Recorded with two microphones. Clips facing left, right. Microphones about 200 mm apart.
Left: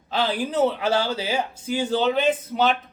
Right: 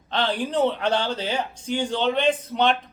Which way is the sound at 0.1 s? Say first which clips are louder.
Even; 5° left (ahead or behind).